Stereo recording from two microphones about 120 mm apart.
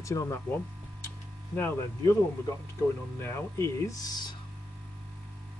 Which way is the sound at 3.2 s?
25° left (ahead or behind).